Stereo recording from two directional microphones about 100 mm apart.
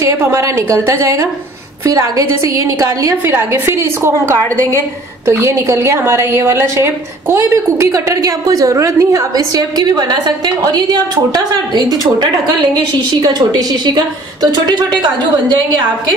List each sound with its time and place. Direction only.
0.0 s a woman's voice: 30° right (ahead or behind); by 15.6 s 50° right (ahead or behind)